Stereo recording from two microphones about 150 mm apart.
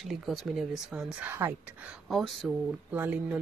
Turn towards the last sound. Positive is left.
turn(degrees=-10)  # may be behind; listen again after turning